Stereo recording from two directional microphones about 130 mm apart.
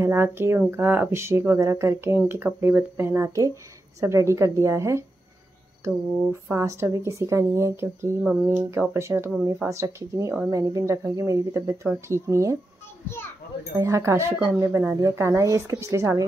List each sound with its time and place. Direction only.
0.0 s speech: 20° right (ahead or behind)
6.5 s speech: 20° right (ahead or behind)
8.2 s speech: 5° right (ahead or behind)
8.6 s speech: 20° right (ahead or behind)
13.7 s speech: 20° right (ahead or behind)